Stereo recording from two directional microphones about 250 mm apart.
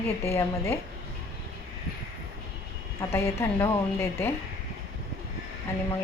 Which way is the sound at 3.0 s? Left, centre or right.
Centre.